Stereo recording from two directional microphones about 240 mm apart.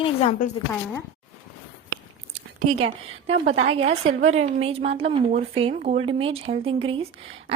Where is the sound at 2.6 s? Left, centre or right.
Right.